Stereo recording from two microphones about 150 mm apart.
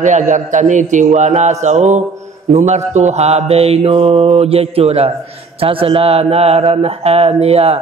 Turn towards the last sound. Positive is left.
turn(degrees=-45)  # may be behind; listen again after turning